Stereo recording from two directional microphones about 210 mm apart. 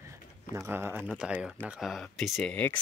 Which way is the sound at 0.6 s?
10° right (ahead or behind).